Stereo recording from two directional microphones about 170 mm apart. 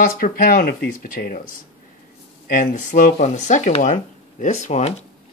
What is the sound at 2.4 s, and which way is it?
Speech, 50° left (ahead or behind).